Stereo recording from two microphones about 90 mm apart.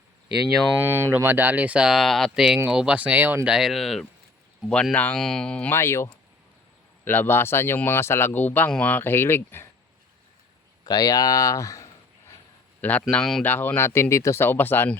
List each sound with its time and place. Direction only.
0.8 s speech: 25° right (ahead or behind)
3.4 s speech: 5° right (ahead or behind); by 5.7 s 10° left (ahead or behind)
5.7 s speech: 30° left (ahead or behind)
10.8 s speech: 45° left (ahead or behind)
12.8 s speech: 20° left (ahead or behind)
13.4 s speech: 20° left (ahead or behind)